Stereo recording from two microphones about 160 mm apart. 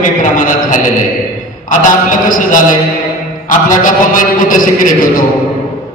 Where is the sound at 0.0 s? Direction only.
55° left (ahead or behind).